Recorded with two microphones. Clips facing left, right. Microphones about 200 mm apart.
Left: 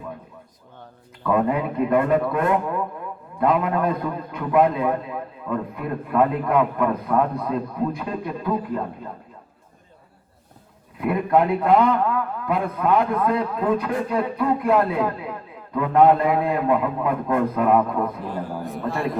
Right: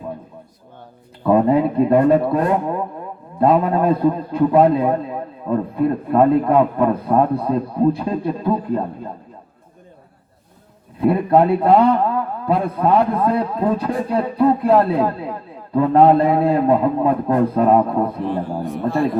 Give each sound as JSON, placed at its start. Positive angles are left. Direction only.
{"t": 1.2, "sound": "a man's voice", "side_deg": -30}
{"t": 11.0, "sound": "a man's voice", "side_deg": -30}
{"t": 18.6, "sound": "a man's voice", "side_deg": 0}